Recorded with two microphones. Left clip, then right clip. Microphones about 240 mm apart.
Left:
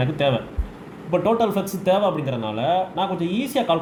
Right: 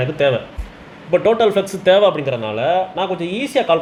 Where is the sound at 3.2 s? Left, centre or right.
Right.